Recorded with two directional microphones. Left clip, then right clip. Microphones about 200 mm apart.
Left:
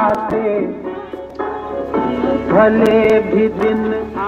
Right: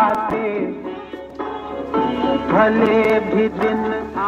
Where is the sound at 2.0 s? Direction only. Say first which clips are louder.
Left 1 dB; 20° right (ahead or behind).